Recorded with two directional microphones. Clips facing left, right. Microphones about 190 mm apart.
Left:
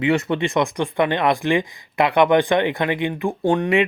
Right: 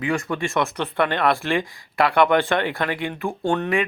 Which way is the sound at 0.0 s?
25° left (ahead or behind).